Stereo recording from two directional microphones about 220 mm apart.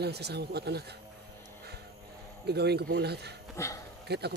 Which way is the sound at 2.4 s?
50° right (ahead or behind).